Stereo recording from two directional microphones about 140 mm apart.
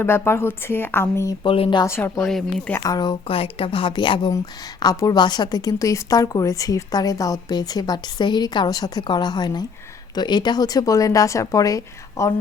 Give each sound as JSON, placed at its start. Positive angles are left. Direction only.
{"t": 0.0, "sound": "speech", "side_deg": 15}
{"t": 1.5, "sound": "a woman's voice", "side_deg": 40}
{"t": 1.8, "sound": "speech", "side_deg": 20}
{"t": 2.2, "sound": "speech", "side_deg": 5}
{"t": 2.7, "sound": "a woman's voice", "side_deg": 25}